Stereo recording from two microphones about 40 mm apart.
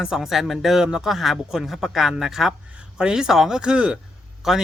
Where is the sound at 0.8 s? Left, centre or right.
Right.